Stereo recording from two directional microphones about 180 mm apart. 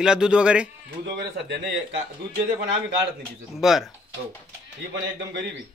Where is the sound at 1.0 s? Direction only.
70° right (ahead or behind).